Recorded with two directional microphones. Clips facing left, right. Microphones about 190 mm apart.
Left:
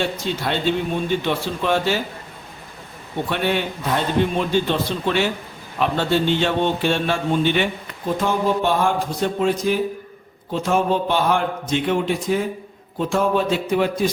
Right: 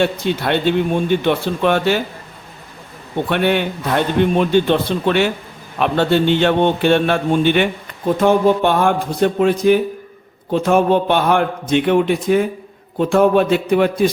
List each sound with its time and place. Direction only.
0.0 s speech: 60° right (ahead or behind)
3.2 s speech: 60° right (ahead or behind)